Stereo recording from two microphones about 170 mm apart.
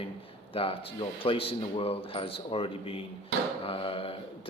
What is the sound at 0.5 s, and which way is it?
Speech, 35° left (ahead or behind).